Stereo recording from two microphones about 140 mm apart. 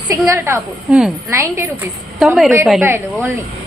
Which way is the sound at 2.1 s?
Centre (ahead or behind).